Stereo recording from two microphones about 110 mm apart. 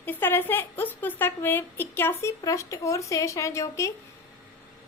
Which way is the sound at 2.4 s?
30° left (ahead or behind).